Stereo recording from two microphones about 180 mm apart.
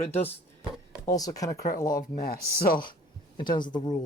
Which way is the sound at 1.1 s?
20° left (ahead or behind).